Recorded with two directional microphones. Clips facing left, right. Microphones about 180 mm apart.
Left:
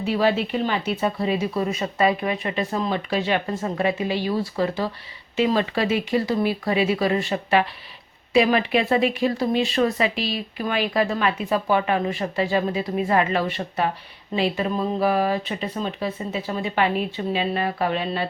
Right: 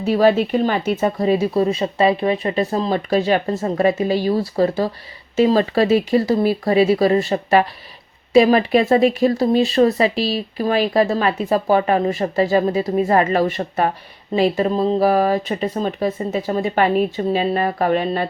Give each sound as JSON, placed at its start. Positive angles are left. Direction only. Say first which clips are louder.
{"t": 0.0, "sound": "speech", "louder": "right 6 dB", "side_deg": -45}